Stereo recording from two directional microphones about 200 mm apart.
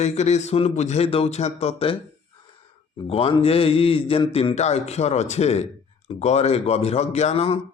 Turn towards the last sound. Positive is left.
turn(degrees=30)  # may be behind; listen again after turning